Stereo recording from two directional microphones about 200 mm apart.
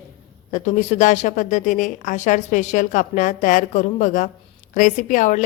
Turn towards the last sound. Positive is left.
turn(degrees=40)  # may be behind; listen again after turning